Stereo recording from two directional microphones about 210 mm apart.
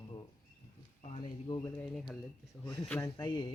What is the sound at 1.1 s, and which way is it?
Speech, 20° left (ahead or behind).